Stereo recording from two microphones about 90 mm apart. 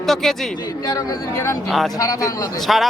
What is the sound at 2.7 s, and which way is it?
Speech, centre (ahead or behind).